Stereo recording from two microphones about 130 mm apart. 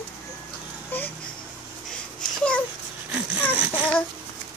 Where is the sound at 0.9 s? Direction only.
15° left (ahead or behind).